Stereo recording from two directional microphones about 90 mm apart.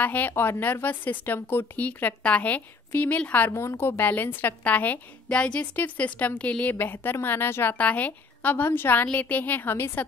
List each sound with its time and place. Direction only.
0.0 s speech: 20° left (ahead or behind)